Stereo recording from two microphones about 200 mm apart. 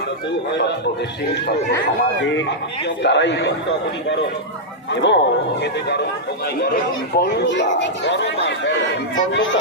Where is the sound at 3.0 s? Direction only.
60° left (ahead or behind).